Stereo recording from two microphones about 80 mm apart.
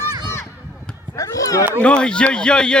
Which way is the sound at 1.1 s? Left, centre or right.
Left.